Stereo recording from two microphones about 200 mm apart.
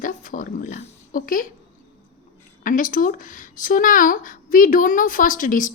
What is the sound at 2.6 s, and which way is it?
Speech, 40° left (ahead or behind).